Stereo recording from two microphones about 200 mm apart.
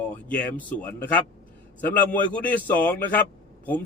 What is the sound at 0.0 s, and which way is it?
A man's voice, 5° left (ahead or behind).